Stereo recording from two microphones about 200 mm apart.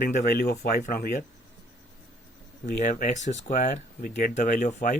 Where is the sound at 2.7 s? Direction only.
35° left (ahead or behind).